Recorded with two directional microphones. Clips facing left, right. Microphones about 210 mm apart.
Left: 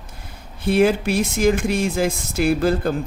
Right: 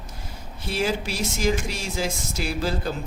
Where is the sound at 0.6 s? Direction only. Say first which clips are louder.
Left 9 dB; 55° left (ahead or behind).